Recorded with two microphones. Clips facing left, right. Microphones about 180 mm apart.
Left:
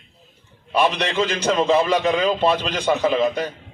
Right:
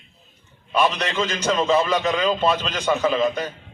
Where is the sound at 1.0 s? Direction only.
35° left (ahead or behind).